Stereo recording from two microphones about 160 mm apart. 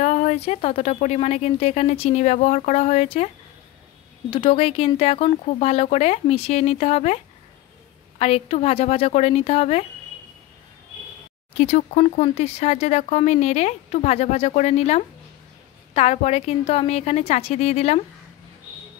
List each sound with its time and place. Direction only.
0.0 s speech: 45° left (ahead or behind)
4.3 s speech: 35° left (ahead or behind)
8.2 s speech: 40° left (ahead or behind)
11.5 s speech: 45° left (ahead or behind)